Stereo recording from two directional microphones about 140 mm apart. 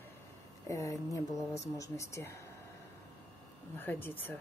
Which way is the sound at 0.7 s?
25° left (ahead or behind).